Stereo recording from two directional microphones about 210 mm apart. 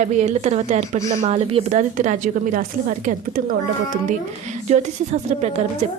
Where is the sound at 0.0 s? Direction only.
35° right (ahead or behind).